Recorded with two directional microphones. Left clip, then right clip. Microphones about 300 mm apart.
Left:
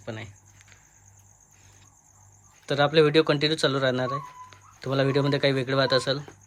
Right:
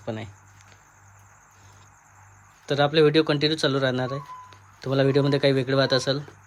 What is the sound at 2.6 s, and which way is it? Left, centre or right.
Speech, centre.